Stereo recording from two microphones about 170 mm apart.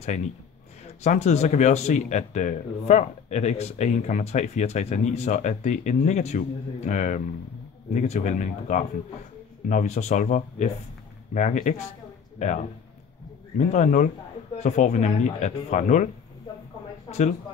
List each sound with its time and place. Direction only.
1.0 s speech: 40° left (ahead or behind)